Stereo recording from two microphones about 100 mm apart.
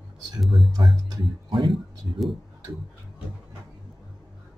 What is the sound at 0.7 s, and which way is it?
Speech, 45° right (ahead or behind).